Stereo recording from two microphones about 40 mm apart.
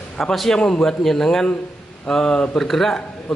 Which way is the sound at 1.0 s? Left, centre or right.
Centre.